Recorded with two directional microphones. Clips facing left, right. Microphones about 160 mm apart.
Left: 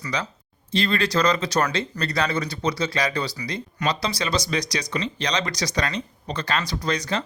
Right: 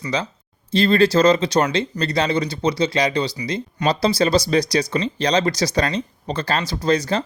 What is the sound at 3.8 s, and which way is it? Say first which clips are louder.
Speech: right 8 dB; 35° right (ahead or behind).